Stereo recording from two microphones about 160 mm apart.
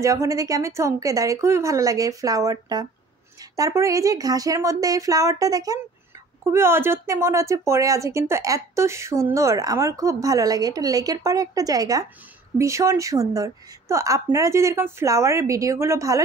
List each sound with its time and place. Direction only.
0.0 s a woman's voice: 20° right (ahead or behind)